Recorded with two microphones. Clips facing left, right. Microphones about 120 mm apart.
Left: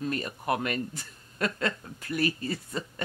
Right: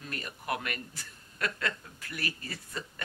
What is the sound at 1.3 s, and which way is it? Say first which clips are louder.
Speech: left 5 dB; 30° left (ahead or behind).